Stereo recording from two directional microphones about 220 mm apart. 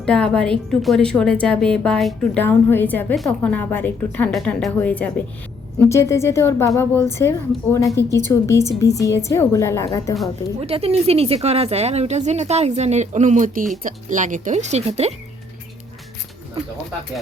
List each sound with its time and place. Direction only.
0.0 s a woman's voice: 5° left (ahead or behind)
10.6 s a woman's voice: 25° right (ahead or behind)